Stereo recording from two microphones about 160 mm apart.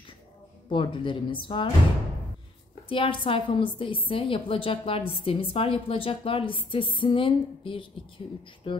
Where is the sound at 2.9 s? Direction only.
30° left (ahead or behind).